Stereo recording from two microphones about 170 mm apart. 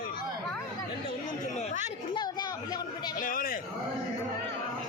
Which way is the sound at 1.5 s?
45° left (ahead or behind).